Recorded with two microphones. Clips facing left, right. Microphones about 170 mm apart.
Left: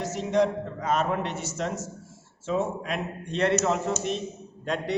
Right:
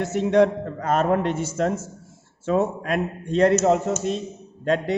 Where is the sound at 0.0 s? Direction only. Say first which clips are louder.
Right 6 dB; 60° right (ahead or behind).